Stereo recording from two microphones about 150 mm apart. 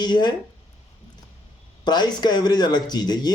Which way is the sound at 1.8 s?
30° left (ahead or behind).